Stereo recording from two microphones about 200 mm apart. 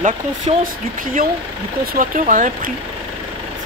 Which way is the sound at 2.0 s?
40° right (ahead or behind).